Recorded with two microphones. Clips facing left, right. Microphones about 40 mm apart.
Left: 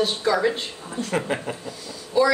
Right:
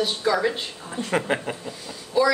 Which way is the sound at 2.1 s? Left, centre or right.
Centre.